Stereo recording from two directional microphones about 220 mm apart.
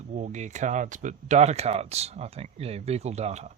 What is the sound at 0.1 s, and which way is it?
Speech, 35° right (ahead or behind).